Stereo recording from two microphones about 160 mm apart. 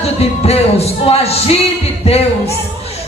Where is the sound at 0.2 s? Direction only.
40° left (ahead or behind).